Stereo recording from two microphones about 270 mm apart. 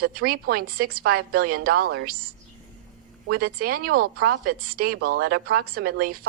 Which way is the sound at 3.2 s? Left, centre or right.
Right.